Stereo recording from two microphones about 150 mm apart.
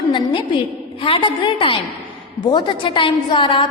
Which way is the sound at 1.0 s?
35° left (ahead or behind).